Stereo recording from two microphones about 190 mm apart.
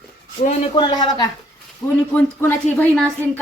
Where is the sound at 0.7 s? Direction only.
20° left (ahead or behind).